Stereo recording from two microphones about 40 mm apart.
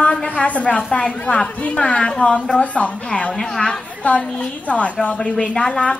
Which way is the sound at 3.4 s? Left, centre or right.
Left.